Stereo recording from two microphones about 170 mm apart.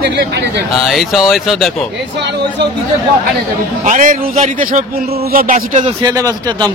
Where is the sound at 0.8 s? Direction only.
Centre (ahead or behind).